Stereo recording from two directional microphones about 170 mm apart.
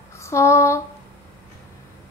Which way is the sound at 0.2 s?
15° left (ahead or behind).